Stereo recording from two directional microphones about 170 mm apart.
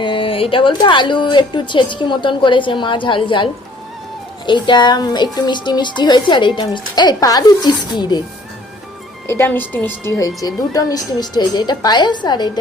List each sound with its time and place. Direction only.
0.0 s speech: 30° left (ahead or behind)
9.2 s speech: 15° left (ahead or behind)